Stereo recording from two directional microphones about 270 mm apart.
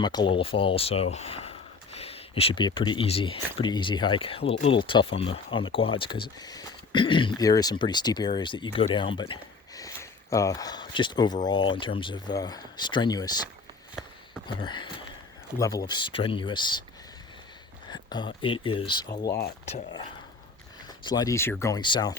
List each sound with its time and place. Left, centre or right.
0.0 s speech: centre
14.4 s speech: centre
17.9 s speech: centre
19.3 s speech: left
19.6 s speech: centre